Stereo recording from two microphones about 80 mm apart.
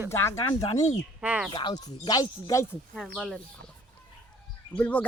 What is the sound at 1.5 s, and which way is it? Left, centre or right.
Speech, left.